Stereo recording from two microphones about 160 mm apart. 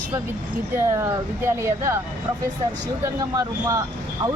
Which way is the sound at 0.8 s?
15° right (ahead or behind).